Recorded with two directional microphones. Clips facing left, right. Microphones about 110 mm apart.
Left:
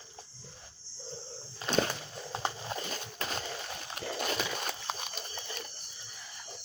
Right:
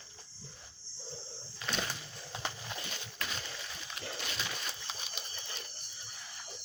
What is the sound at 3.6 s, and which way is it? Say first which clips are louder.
Horse: left 5 dB; 50° left (ahead or behind).